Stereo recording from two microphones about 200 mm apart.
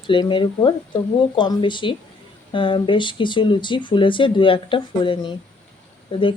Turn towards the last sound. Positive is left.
turn(degrees=25)  # may be behind; listen again after turning